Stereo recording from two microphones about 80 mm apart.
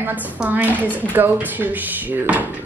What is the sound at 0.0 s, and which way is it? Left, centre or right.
A woman's voice, right.